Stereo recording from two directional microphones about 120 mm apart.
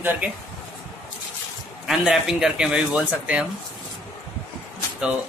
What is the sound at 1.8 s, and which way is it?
Speech, 5° right (ahead or behind).